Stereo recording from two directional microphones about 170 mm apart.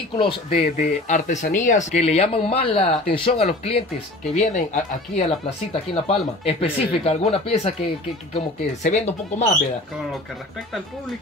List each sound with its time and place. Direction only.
0.2 s speech: 30° left (ahead or behind)
0.7 s speech: 45° left (ahead or behind)
8.8 s speech: 40° left (ahead or behind)